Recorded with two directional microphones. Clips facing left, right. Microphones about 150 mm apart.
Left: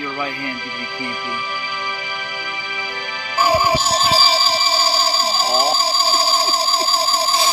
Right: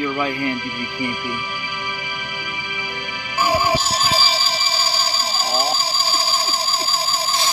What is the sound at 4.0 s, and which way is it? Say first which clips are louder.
Music: left 4 dB; 30° left (ahead or behind).